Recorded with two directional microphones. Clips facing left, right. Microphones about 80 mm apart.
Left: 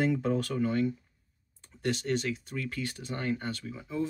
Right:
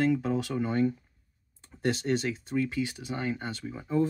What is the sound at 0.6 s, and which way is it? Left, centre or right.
Speech, right.